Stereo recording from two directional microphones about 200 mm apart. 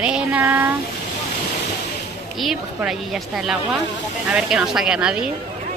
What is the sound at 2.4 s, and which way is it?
A woman's voice, centre (ahead or behind).